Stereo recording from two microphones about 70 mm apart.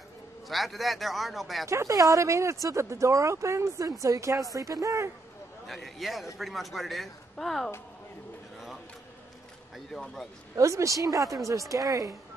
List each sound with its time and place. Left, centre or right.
0.5 s speech: centre
1.7 s speech: right
5.7 s speech: centre
9.9 s speech: centre
10.5 s speech: right